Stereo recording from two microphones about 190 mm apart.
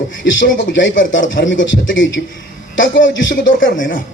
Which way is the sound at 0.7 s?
75° left (ahead or behind).